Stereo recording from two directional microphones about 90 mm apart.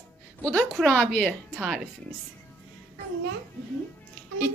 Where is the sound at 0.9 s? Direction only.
15° left (ahead or behind).